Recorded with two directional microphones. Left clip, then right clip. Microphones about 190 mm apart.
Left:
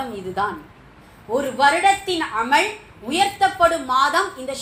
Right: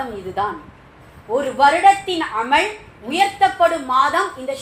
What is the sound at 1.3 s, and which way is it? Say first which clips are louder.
A woman's voice: right 3 dB; 20° left (ahead or behind).